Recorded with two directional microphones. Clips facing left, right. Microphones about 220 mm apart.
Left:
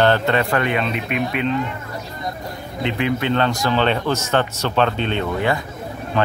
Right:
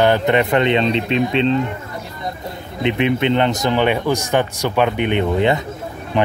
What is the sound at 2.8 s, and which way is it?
Speech, 20° right (ahead or behind).